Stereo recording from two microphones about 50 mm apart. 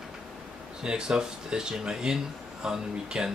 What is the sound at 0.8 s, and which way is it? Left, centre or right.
Speech, centre.